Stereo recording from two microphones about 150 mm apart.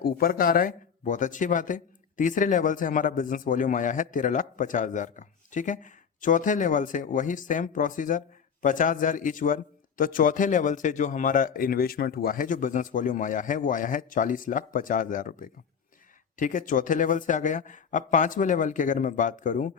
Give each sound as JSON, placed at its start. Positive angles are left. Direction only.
{"t": 0.0, "sound": "speech", "side_deg": 75}